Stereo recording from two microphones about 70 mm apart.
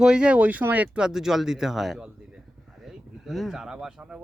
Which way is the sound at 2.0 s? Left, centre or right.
Centre.